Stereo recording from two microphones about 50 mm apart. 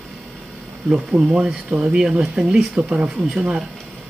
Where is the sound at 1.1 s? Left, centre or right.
Right.